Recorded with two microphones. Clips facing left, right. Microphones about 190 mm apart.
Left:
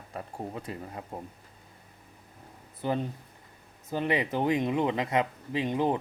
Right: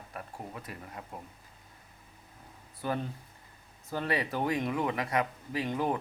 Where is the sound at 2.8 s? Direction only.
20° left (ahead or behind).